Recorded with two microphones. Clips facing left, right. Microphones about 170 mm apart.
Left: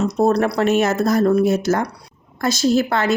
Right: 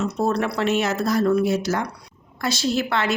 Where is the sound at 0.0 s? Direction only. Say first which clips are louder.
Left 6 dB; 40° left (ahead or behind).